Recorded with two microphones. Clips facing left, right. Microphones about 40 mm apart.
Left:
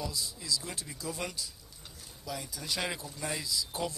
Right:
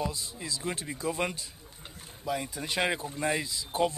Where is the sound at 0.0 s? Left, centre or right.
Right.